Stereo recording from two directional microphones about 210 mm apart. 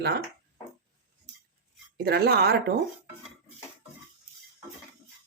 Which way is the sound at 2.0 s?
50° right (ahead or behind).